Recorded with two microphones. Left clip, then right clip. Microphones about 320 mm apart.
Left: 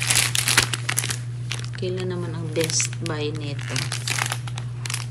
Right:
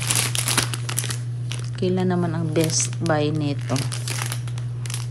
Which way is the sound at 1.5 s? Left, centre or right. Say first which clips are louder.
Right 3 dB; centre.